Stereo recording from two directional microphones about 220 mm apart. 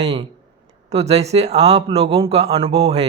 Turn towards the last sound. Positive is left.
turn(degrees=-25)  # may be behind; listen again after turning